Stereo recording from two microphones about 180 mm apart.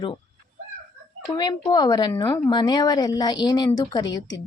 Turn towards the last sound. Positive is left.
turn(degrees=20)  # may be behind; listen again after turning